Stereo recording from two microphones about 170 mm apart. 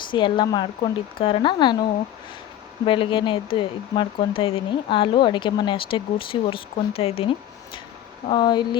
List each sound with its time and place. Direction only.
0.1 s speech: 30° left (ahead or behind)
2.8 s speech: 30° left (ahead or behind)